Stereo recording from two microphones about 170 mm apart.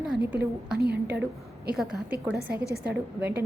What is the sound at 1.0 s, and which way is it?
A woman's voice, 10° right (ahead or behind).